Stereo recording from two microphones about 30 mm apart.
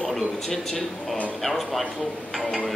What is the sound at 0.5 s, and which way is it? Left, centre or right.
A man's voice, centre.